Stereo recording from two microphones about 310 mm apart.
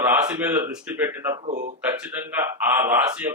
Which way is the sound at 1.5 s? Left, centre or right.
Right.